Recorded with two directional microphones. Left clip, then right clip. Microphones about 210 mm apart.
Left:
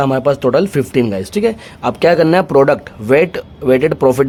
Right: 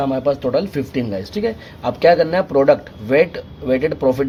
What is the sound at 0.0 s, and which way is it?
Speech, 40° left (ahead or behind).